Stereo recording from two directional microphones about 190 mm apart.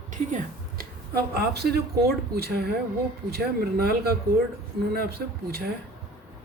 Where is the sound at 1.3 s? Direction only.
55° right (ahead or behind).